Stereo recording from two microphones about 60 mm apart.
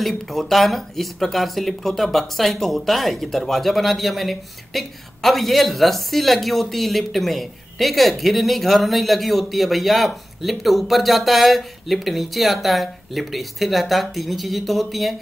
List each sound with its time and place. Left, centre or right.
0.0 s speech: centre